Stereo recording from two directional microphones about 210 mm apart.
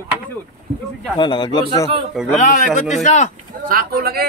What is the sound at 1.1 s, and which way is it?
Speech, 20° left (ahead or behind).